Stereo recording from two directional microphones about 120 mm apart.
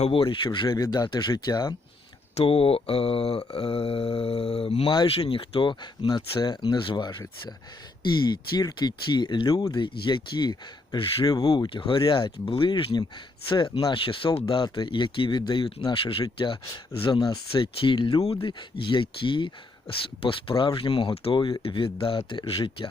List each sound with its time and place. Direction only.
0.0 s speech: 50° left (ahead or behind); by 1.7 s 30° left (ahead or behind)
2.3 s speech: 50° left (ahead or behind)
11.3 s speech: 35° left (ahead or behind)